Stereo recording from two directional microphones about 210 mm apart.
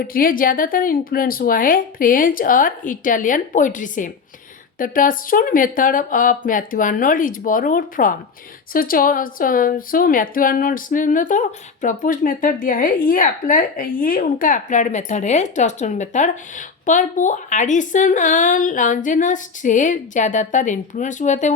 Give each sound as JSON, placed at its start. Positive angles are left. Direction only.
{"t": 0.0, "sound": "speech", "side_deg": 45}